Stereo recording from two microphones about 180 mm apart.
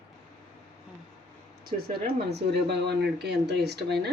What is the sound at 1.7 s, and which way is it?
Speech, 40° right (ahead or behind).